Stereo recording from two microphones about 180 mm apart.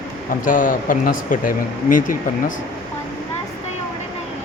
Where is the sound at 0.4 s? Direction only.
45° left (ahead or behind).